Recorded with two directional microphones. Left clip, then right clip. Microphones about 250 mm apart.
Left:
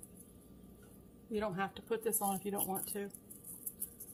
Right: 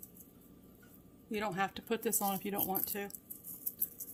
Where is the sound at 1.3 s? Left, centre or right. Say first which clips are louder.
Right 2 dB; right.